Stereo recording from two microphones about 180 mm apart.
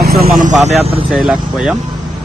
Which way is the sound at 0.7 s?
35° right (ahead or behind).